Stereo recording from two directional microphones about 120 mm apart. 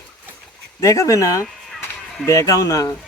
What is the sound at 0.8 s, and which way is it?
Speech, 25° left (ahead or behind).